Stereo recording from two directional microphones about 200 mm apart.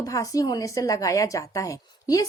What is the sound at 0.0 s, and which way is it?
Speech, 15° left (ahead or behind).